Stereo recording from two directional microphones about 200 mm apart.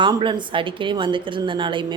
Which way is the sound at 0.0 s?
25° right (ahead or behind).